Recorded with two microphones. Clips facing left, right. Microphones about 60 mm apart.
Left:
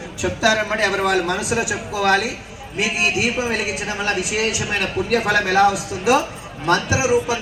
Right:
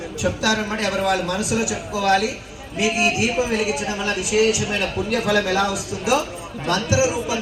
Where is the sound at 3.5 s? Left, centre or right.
Left.